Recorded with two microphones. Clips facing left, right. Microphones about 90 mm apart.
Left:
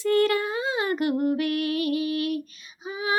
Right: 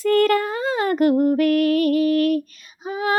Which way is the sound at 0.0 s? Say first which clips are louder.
Right 5 dB; 45° right (ahead or behind).